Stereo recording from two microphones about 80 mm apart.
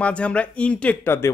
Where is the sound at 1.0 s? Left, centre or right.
Left.